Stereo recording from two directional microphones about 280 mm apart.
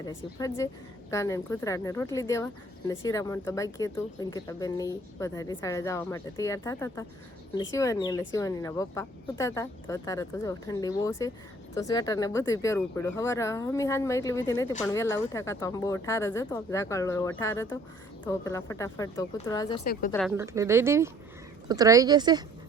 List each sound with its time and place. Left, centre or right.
0.0 s speech: centre
19.8 s a woman's voice: left
20.1 s speech: centre
20.4 s speech: centre